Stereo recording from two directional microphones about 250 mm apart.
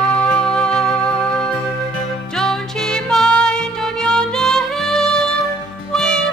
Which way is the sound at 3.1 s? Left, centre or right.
Centre.